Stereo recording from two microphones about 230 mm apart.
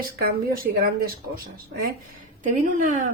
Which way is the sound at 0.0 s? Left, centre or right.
Right.